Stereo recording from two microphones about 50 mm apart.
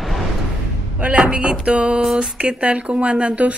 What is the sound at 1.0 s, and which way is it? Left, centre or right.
Speech, centre.